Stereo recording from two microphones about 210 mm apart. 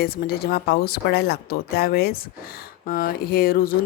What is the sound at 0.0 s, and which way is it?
A woman's voice, 45° left (ahead or behind).